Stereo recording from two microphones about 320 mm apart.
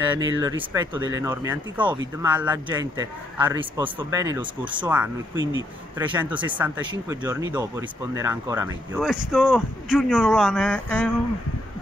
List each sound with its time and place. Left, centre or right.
0.0 s a sound: centre
0.4 s a man's voice: centre
5.3 s speech: right
5.9 s a man's voice: centre